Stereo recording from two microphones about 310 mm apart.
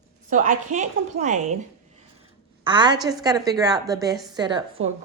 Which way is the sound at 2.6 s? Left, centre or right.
Centre.